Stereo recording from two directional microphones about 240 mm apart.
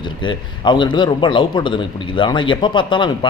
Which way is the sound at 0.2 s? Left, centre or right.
Centre.